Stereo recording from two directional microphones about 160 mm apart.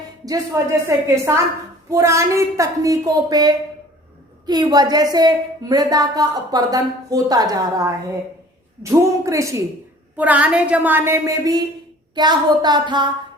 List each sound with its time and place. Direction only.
0.3 s a woman's voice: 20° right (ahead or behind)